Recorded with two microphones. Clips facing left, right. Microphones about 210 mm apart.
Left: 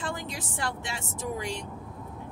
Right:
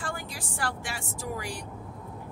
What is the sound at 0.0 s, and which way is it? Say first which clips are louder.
A woman's voice: left 2 dB; 20° left (ahead or behind).